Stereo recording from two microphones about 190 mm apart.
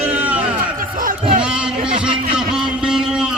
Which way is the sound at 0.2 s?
10° right (ahead or behind).